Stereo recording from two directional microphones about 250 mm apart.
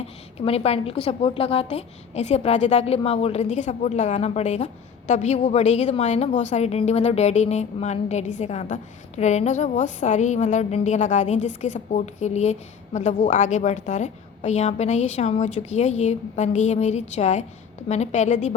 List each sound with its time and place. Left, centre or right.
0.3 s a woman's voice: left